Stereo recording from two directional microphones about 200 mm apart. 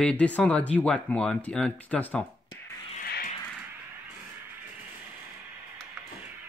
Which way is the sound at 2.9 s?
45° left (ahead or behind).